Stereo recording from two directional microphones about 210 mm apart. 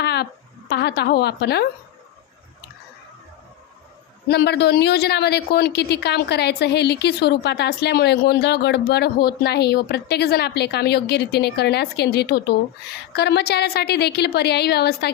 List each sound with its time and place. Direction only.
0.0 s a sound: 50° left (ahead or behind)
0.7 s a woman's voice: 50° left (ahead or behind)
4.3 s a woman's voice: 50° left (ahead or behind)